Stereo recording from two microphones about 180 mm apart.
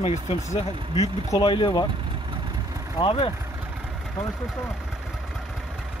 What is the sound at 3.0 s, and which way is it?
Speech, 25° left (ahead or behind).